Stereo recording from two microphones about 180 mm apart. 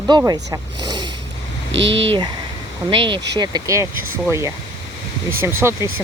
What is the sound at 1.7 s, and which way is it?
Speech, 90° right.